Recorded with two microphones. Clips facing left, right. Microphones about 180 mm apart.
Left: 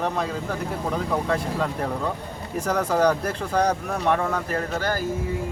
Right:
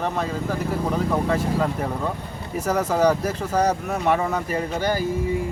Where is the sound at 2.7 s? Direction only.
5° right (ahead or behind).